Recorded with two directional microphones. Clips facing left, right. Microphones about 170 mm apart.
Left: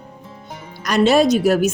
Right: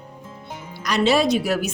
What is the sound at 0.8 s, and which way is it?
Speech, 50° left (ahead or behind).